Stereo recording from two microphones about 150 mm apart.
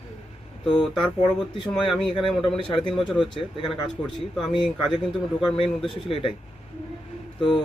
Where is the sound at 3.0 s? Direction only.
Centre (ahead or behind).